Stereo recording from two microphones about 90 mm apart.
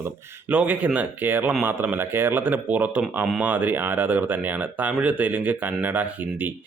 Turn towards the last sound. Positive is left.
turn(degrees=-20)  # may be behind; listen again after turning